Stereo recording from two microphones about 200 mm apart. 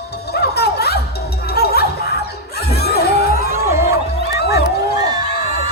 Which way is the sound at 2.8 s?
55° left (ahead or behind).